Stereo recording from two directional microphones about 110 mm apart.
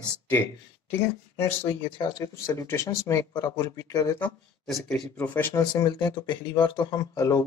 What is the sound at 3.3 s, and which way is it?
Speech, 40° left (ahead or behind).